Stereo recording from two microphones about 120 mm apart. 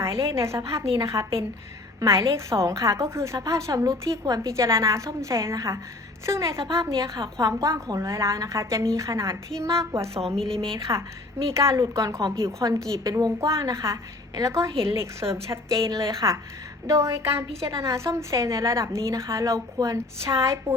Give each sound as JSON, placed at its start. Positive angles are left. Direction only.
{"t": 0.0, "sound": "a woman's voice", "side_deg": -25}
{"t": 10.3, "sound": "a woman's voice", "side_deg": 5}
{"t": 10.9, "sound": "a woman's voice", "side_deg": -25}